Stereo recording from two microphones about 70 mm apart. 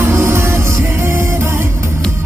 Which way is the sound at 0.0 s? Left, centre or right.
Right.